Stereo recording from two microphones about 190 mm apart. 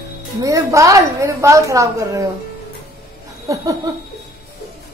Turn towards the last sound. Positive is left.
turn(degrees=-20)  # may be behind; listen again after turning